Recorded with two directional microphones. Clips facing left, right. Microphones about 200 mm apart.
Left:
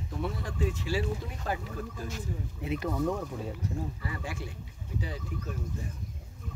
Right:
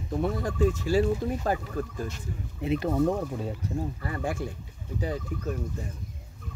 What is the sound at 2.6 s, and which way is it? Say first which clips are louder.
Speech: right 6 dB; 25° right (ahead or behind).